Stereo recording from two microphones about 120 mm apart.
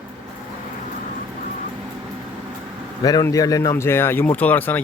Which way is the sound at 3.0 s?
30° left (ahead or behind).